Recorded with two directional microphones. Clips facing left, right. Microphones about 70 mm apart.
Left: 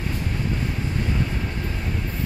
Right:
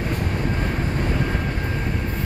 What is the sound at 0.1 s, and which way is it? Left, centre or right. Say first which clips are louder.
Train: right 3 dB; right.